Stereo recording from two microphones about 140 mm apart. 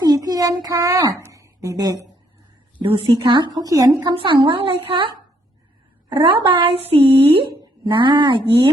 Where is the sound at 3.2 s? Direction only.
35° right (ahead or behind).